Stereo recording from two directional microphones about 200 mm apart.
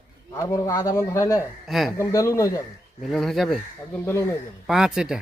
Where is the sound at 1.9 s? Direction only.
15° left (ahead or behind).